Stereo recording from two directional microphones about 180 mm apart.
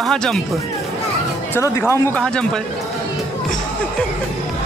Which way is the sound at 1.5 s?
15° left (ahead or behind).